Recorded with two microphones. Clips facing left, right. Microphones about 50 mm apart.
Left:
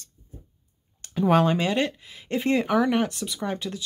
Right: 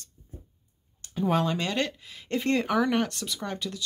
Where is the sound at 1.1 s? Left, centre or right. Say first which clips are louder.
Left 5 dB; left.